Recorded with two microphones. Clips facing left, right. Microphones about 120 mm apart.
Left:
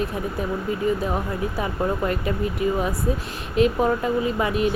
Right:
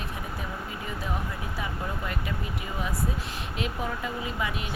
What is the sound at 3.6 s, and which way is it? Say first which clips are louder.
Speech: left 13 dB; 45° left (ahead or behind).